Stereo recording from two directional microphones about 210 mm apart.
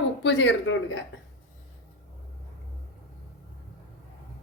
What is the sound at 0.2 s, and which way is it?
Speech, 60° left (ahead or behind).